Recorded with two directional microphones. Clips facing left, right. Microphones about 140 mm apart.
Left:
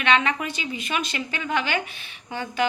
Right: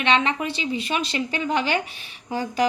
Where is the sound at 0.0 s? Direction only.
30° right (ahead or behind).